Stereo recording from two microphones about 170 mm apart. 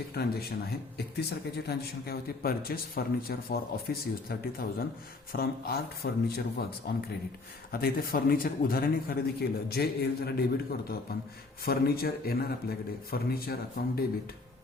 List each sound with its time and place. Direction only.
0.1 s a man's voice: 65° left (ahead or behind)